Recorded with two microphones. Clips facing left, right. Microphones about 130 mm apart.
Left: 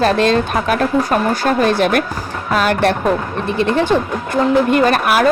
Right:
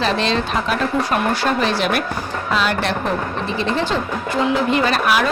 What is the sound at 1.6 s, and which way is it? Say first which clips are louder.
A woman's voice: left 5 dB; 50° left (ahead or behind).